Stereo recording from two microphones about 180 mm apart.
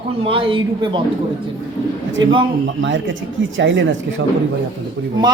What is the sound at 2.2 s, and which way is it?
Speech, 25° right (ahead or behind).